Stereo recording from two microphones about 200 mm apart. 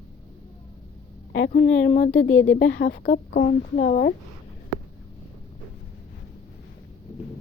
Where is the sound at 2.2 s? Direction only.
65° left (ahead or behind); by 4.1 s 45° left (ahead or behind).